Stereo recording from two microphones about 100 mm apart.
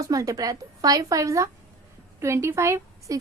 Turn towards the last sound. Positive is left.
turn(degrees=-30)  # may be behind; listen again after turning